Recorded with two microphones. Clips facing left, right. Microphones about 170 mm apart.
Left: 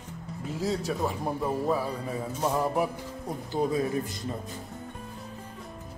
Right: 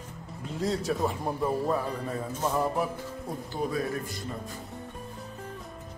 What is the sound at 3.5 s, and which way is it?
Speech, 20° left (ahead or behind).